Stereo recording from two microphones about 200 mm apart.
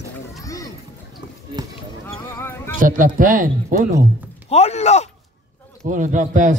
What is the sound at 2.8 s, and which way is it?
Speech, 40° right (ahead or behind).